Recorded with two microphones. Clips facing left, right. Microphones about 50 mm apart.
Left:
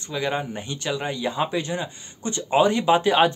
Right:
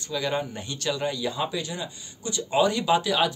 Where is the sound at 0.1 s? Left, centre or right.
Left.